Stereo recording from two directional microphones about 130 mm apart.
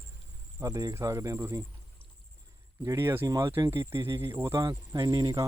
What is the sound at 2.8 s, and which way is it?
Speech, 20° right (ahead or behind).